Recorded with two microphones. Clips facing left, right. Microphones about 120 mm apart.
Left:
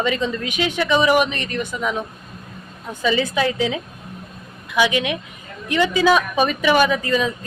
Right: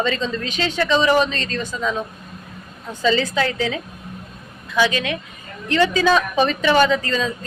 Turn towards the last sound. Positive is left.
turn(degrees=15)  # may be behind; listen again after turning